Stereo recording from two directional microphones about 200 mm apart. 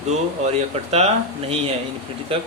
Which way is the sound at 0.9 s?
30° right (ahead or behind).